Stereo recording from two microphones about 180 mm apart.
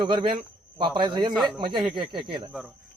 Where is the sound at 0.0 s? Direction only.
25° right (ahead or behind).